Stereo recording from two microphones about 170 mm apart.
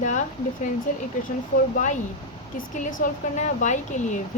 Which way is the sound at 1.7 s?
45° left (ahead or behind).